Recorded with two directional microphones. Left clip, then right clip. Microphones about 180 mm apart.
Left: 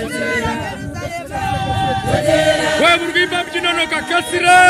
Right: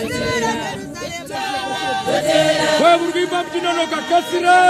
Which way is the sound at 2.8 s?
65° right (ahead or behind).